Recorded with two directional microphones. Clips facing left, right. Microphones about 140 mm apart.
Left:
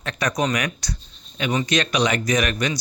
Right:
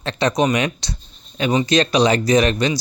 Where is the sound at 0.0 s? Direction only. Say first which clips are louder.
Right 5 dB; 30° right (ahead or behind).